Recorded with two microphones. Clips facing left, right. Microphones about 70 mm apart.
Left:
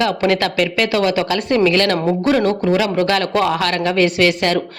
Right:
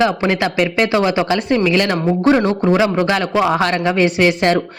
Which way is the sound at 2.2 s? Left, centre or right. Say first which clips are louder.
Right 3 dB; right.